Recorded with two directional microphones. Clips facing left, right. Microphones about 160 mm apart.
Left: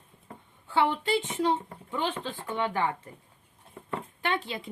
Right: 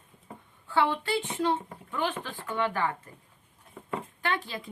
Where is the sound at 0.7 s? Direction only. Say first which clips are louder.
Left 1 dB; 20° left (ahead or behind).